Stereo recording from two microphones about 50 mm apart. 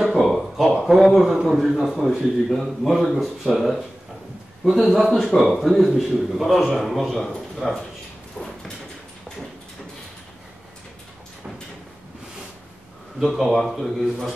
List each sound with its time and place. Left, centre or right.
0.0 s a man's voice: centre
8.4 s cupboard open or close: centre
13.2 s a man's voice: centre